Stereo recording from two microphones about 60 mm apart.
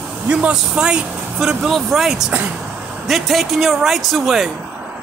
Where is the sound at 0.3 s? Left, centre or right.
Centre.